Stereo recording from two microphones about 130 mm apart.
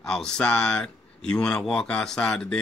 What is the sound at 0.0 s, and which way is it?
A man's voice, 5° left (ahead or behind).